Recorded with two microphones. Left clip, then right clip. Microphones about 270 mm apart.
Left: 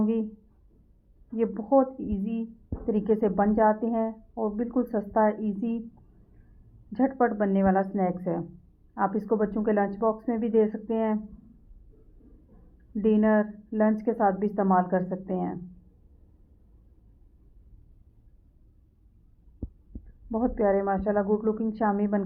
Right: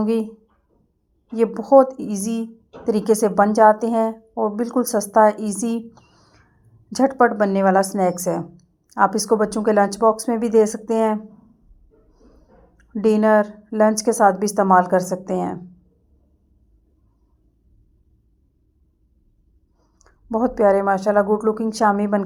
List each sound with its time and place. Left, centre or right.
1.4 s a woman's voice: right
2.0 s a woman's voice: right
2.8 s a woman's voice: right
6.9 s a woman's voice: right
9.9 s a woman's voice: right
12.9 s a woman's voice: right
20.3 s a woman's voice: right